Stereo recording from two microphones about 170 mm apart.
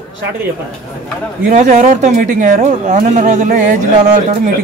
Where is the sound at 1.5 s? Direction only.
50° right (ahead or behind).